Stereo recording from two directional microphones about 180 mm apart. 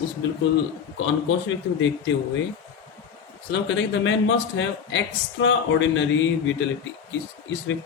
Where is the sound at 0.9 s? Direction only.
90° left.